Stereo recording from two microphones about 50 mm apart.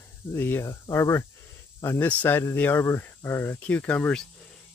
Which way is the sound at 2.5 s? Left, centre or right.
Left.